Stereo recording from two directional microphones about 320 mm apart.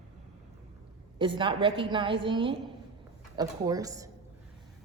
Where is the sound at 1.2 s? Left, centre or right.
Centre.